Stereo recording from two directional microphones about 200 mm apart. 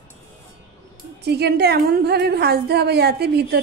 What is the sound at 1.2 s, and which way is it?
A woman's voice, 55° right (ahead or behind).